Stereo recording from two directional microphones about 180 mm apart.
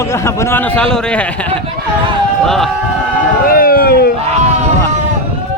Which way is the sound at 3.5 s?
55° left (ahead or behind).